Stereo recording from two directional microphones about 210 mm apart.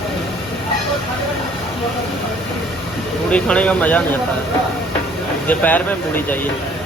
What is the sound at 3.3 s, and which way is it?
Speech, 5° left (ahead or behind).